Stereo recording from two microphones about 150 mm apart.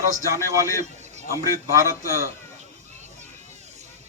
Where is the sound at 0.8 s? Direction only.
50° right (ahead or behind).